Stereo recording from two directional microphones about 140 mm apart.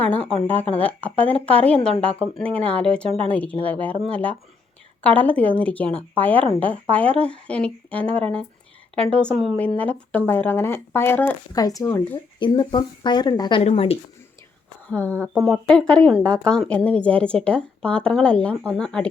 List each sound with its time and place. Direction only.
0.0 s a sound: 10° left (ahead or behind)
0.4 s speech: 10° left (ahead or behind)
11.5 s speech: 25° left (ahead or behind)
11.9 s speech: 15° left (ahead or behind)
12.4 s speech: 35° left (ahead or behind)
13.6 s speech: 45° left (ahead or behind)
14.8 s speech: 10° left (ahead or behind)
15.4 s speech: centre (ahead or behind)